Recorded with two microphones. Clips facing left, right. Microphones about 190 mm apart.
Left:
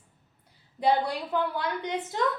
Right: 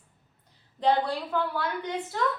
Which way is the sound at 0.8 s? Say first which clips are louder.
Even; 10° left (ahead or behind).